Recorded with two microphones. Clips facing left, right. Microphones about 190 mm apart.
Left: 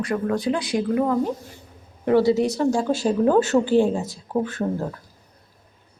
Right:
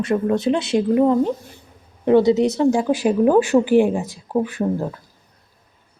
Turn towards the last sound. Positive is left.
turn(degrees=-15)  # may be behind; listen again after turning